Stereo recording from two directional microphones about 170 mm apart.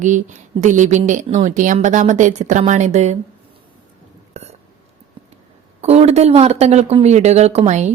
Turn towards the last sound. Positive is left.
turn(degrees=-40)  # may be behind; listen again after turning